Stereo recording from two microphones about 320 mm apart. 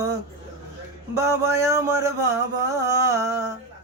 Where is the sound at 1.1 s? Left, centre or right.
Centre.